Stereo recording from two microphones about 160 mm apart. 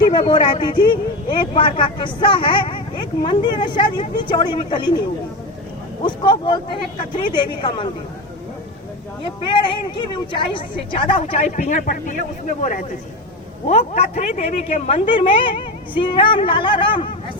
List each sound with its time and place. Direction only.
0.0 s a man's voice: 30° left (ahead or behind)
6.1 s a man's voice: 30° left (ahead or behind)
9.2 s a woman's voice: 30° left (ahead or behind)
11.4 s speech: 50° left (ahead or behind)
13.7 s a woman's voice: 45° left (ahead or behind)